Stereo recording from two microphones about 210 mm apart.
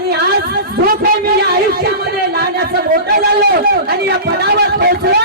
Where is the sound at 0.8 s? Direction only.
50° right (ahead or behind).